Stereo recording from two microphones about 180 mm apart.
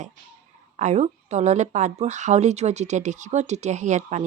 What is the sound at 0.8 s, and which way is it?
A woman's voice, 40° right (ahead or behind).